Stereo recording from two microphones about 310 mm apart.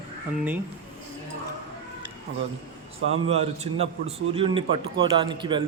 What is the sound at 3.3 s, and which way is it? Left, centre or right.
A man's voice, centre.